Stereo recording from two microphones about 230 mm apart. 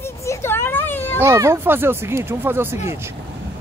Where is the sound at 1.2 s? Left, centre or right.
Centre.